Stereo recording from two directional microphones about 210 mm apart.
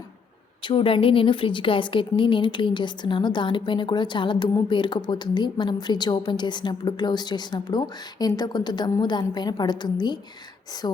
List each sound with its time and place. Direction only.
0.6 s a woman's voice: 25° left (ahead or behind)